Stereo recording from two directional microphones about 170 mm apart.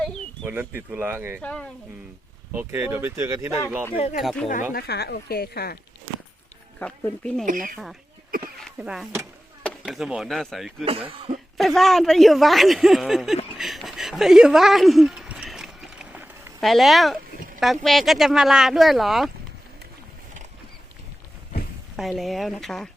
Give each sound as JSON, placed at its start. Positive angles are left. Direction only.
{"t": 0.4, "sound": "speech", "side_deg": -10}
{"t": 1.4, "sound": "speech", "side_deg": 5}
{"t": 2.5, "sound": "speech", "side_deg": -15}
{"t": 3.9, "sound": "speech", "side_deg": 40}
{"t": 4.2, "sound": "speech", "side_deg": 0}
{"t": 4.7, "sound": "speech", "side_deg": 70}
{"t": 6.7, "sound": "speech", "side_deg": 10}
{"t": 7.4, "sound": "speech", "side_deg": -55}
{"t": 8.5, "sound": "speech", "side_deg": 0}
{"t": 13.6, "sound": "a sound", "side_deg": 0}
{"t": 16.6, "sound": "speech", "side_deg": 0}
{"t": 21.9, "sound": "speech", "side_deg": 0}